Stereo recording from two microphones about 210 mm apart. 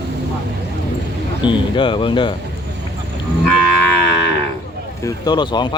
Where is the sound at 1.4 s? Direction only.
20° left (ahead or behind).